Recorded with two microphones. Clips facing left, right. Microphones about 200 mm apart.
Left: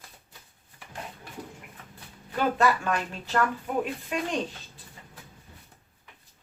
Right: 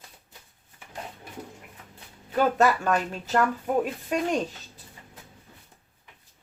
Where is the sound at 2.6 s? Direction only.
45° right (ahead or behind).